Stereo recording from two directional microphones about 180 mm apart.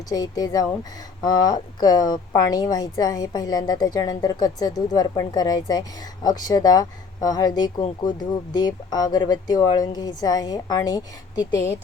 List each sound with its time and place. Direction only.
0.1 s a woman's voice: 20° left (ahead or behind)